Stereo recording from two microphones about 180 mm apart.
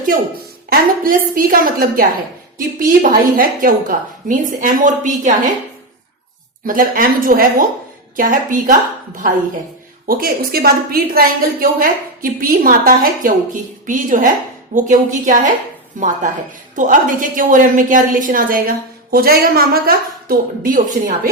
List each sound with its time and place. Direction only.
0.7 s a woman's voice: 50° right (ahead or behind)
6.7 s a woman's voice: 55° right (ahead or behind)
10.1 s a woman's voice: 55° right (ahead or behind)